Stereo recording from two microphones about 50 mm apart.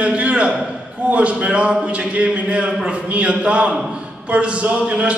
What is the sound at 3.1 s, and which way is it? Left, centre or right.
A man's voice, right.